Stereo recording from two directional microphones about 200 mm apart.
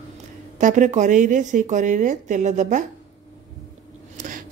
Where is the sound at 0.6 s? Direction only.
40° right (ahead or behind).